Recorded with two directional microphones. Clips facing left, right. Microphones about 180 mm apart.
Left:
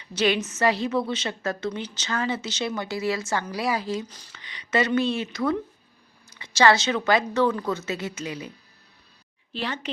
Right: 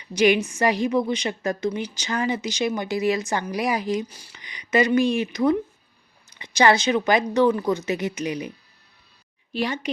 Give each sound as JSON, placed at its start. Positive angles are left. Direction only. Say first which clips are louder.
{"t": 0.0, "sound": "a woman's voice", "louder": "right 5 dB", "side_deg": -15}